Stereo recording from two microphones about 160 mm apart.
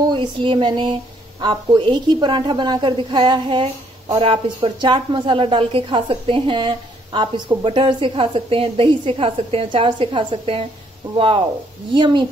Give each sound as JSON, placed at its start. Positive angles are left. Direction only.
{"t": 0.1, "sound": "a woman's voice", "side_deg": -30}